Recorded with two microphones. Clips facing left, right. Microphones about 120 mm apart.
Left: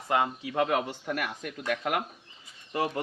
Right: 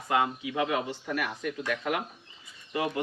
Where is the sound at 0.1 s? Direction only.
40° left (ahead or behind).